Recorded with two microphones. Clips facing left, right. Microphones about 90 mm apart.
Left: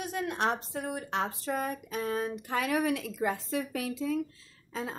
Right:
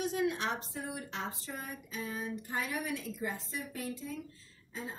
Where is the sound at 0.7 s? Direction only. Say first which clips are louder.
Left 7 dB; 70° left (ahead or behind); by 2.3 s 45° left (ahead or behind).